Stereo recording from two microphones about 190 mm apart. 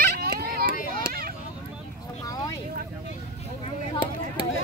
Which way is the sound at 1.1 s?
50° right (ahead or behind).